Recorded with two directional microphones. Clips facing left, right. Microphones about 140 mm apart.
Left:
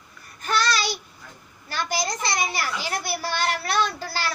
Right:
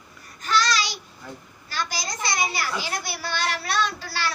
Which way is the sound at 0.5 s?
55° left (ahead or behind).